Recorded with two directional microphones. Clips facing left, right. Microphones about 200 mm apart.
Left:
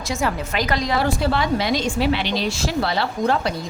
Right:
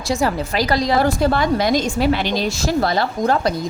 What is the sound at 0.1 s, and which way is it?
A woman's voice, 35° right (ahead or behind).